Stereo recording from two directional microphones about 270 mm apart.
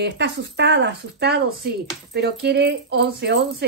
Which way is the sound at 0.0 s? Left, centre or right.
Right.